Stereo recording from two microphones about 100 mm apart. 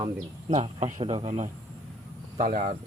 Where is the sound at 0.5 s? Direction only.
80° right.